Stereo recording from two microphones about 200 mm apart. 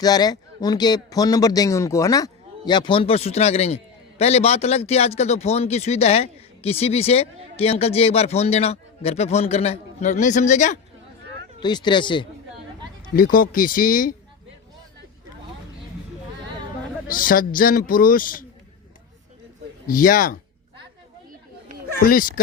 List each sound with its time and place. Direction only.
0.0 s a man's voice: 20° left (ahead or behind); by 10.8 s 35° left (ahead or behind)
11.6 s a man's voice: 20° left (ahead or behind)
13.1 s a man's voice: 45° left (ahead or behind)
17.1 s a man's voice: 45° left (ahead or behind)
19.9 s a man's voice: 45° left (ahead or behind)
22.0 s a man's voice: 45° left (ahead or behind)